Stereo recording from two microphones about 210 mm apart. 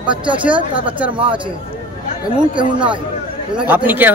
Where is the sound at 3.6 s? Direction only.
10° right (ahead or behind).